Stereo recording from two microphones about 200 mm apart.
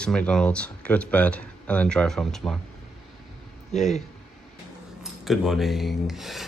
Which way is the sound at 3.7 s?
35° left (ahead or behind).